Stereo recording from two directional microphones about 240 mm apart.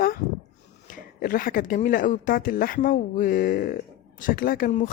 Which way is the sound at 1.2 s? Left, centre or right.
Left.